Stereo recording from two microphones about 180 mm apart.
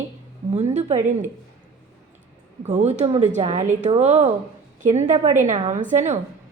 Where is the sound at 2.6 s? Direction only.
40° right (ahead or behind).